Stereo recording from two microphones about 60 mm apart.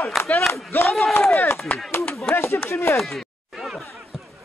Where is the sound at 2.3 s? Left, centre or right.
Left.